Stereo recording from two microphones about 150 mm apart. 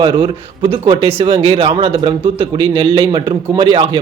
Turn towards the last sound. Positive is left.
turn(degrees=-35)  # may be behind; listen again after turning